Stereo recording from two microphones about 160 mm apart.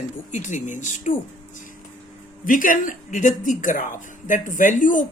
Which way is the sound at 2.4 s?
55° left (ahead or behind).